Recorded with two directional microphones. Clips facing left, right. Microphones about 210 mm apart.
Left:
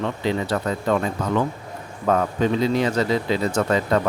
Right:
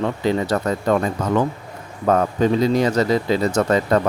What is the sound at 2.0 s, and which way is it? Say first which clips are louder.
Speech: right 3 dB; 40° right (ahead or behind).